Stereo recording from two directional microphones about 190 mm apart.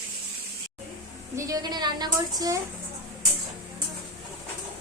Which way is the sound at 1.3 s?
20° right (ahead or behind).